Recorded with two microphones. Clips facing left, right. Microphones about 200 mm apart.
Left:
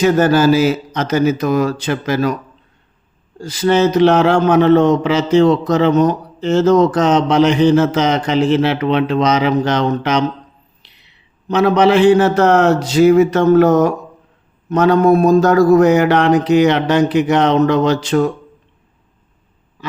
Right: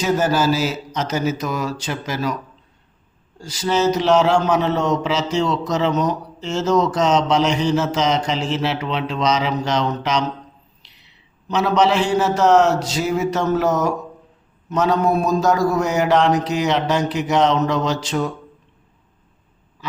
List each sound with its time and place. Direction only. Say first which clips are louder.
0.0 s a man's voice: left 7 dB; 55° left (ahead or behind)
3.4 s a man's voice: left 5 dB; 55° left (ahead or behind)
11.4 s a man's voice: left 5 dB; 55° left (ahead or behind)